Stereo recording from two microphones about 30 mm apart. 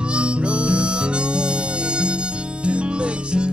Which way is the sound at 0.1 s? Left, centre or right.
Right.